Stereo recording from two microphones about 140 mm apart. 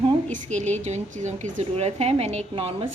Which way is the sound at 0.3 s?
60° right (ahead or behind).